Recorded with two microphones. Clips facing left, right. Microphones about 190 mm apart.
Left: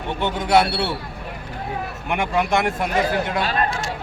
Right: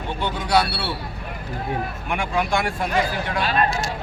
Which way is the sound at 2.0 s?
20° left (ahead or behind).